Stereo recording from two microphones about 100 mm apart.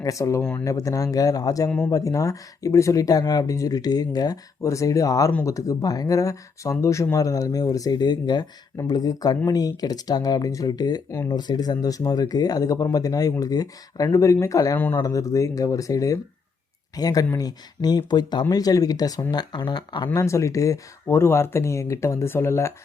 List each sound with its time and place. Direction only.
0.0 s speech: 30° left (ahead or behind); by 20.1 s 50° left (ahead or behind)
20.1 s speech: 30° left (ahead or behind)